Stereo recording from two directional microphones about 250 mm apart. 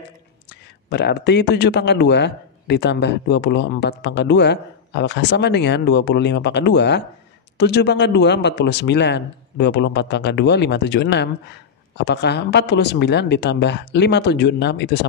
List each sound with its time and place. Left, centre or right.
0.8 s a man's voice: left